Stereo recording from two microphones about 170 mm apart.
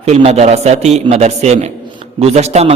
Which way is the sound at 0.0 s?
35° right (ahead or behind).